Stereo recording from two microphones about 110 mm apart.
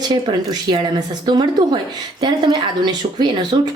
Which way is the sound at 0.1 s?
40° right (ahead or behind).